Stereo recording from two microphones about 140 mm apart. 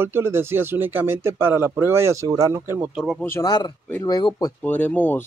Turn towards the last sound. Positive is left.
turn(degrees=10)  # may be behind; listen again after turning